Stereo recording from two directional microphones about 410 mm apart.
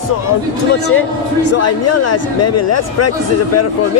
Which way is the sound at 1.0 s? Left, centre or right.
Left.